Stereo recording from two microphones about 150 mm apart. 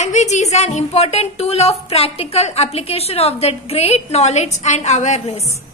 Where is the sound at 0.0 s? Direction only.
50° left (ahead or behind).